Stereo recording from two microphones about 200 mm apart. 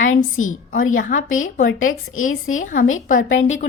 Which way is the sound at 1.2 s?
85° left.